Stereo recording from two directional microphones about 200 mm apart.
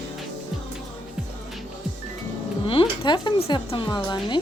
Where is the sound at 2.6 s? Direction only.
25° left (ahead or behind).